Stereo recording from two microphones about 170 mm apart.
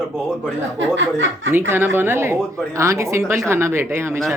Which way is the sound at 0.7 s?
90° right.